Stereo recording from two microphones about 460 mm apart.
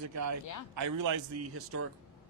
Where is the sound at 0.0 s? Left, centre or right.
Right.